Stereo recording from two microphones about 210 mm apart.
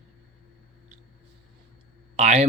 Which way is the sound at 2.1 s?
30° right (ahead or behind).